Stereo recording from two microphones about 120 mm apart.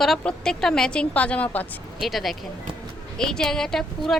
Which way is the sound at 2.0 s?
Centre (ahead or behind).